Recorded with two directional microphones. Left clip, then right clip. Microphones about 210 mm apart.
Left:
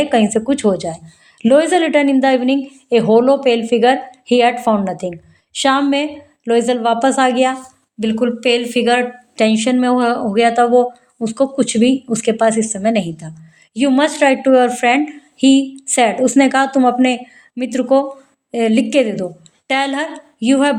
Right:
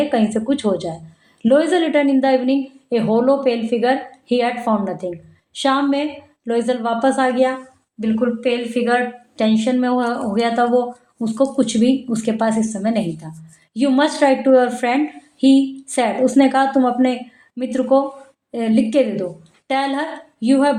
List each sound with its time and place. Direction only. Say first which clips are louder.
0.0 s a woman's voice: left 4 dB; 40° left (ahead or behind)